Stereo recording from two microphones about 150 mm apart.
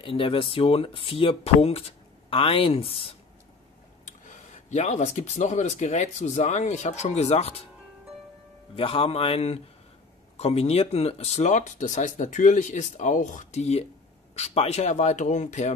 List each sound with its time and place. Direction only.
0.0 s speech: 35° left (ahead or behind)
4.6 s speech: 50° left (ahead or behind)
8.7 s speech: 35° left (ahead or behind); by 15.7 s 55° left (ahead or behind)